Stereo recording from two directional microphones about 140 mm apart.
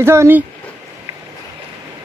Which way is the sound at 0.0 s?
20° right (ahead or behind).